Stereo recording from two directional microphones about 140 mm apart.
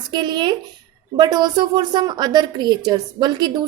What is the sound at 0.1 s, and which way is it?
A woman's voice, 35° right (ahead or behind).